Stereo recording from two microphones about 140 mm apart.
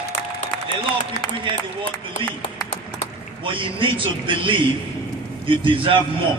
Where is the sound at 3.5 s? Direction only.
40° right (ahead or behind).